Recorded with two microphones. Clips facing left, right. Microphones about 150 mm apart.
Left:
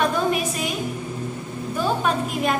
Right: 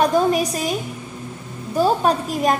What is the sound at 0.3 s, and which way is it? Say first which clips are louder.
Speech: right 4 dB; 40° right (ahead or behind).